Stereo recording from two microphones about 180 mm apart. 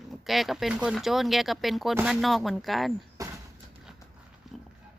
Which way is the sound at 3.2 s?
20° right (ahead or behind).